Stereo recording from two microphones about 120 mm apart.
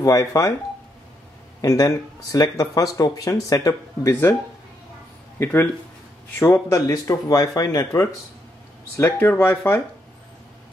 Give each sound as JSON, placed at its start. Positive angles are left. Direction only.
{"t": 0.0, "sound": "speech", "side_deg": 25}
{"t": 1.6, "sound": "speech", "side_deg": 25}
{"t": 5.4, "sound": "speech", "side_deg": 20}